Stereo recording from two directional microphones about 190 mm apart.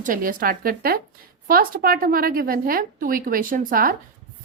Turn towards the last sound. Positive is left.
turn(degrees=-45)  # may be behind; listen again after turning